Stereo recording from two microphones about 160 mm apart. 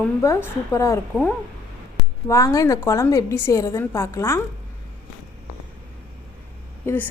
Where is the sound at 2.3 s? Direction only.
20° left (ahead or behind).